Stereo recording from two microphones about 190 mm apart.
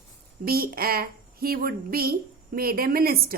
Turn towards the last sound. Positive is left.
turn(degrees=-50)  # may be behind; listen again after turning